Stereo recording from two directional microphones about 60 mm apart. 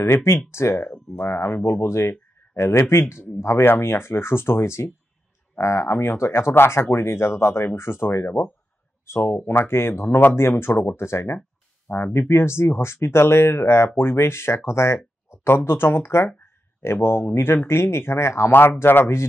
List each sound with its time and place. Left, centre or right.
0.0 s speech: left
18.5 s speech: left